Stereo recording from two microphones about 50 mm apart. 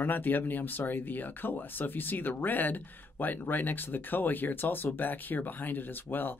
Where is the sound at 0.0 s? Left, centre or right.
Left.